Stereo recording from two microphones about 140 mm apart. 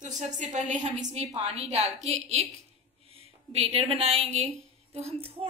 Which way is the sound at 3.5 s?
45° right (ahead or behind).